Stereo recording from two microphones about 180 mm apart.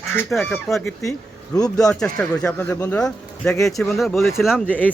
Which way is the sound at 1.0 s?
20° left (ahead or behind).